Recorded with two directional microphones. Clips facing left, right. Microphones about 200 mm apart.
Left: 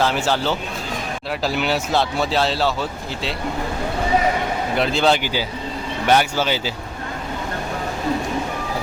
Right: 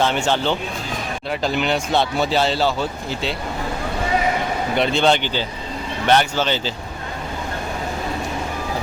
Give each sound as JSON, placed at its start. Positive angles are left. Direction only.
{"t": 0.0, "sound": "speech", "side_deg": 0}
{"t": 4.8, "sound": "speech", "side_deg": 0}